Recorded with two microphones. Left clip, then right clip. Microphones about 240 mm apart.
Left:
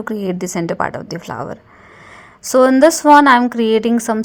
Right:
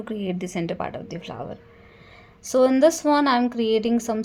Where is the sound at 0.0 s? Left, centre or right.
Left.